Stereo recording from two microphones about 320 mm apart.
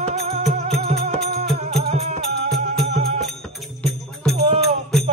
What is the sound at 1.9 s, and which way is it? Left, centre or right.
Music, centre.